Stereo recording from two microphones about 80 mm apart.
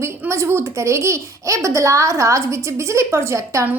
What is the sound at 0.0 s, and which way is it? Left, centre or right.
A child's voice, right.